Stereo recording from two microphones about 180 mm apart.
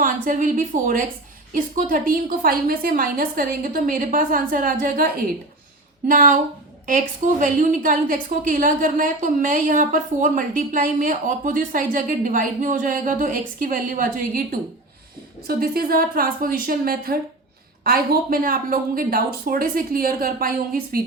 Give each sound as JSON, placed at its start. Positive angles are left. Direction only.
{"t": 0.0, "sound": "a woman's voice", "side_deg": -45}